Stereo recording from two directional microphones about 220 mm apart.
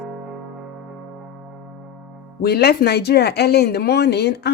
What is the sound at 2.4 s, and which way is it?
Speech, 45° left (ahead or behind).